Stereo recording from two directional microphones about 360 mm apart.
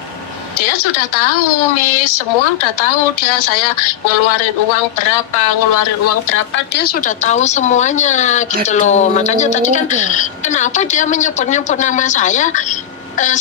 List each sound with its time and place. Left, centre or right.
5.4 s speech: left
5.8 s speech: left
6.3 s speech: left